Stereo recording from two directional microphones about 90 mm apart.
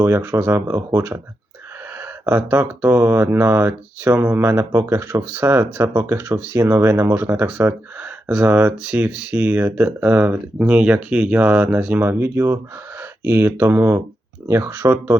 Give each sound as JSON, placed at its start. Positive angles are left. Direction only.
{"t": 0.0, "sound": "speech", "side_deg": -30}